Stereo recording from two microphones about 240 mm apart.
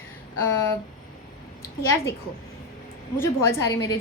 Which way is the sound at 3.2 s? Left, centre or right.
Centre.